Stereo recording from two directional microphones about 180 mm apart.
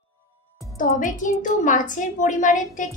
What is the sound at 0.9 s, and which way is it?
A woman's voice, 45° left (ahead or behind).